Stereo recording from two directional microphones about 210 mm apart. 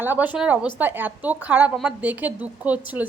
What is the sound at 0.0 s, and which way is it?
A woman's voice, 10° right (ahead or behind).